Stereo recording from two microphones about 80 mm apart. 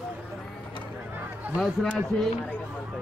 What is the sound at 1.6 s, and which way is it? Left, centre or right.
Speech, centre.